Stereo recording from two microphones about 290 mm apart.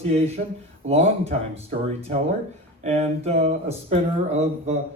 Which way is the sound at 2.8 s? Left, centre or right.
Right.